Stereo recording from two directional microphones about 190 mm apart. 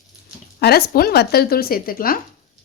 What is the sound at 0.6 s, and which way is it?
Speech, 55° left (ahead or behind).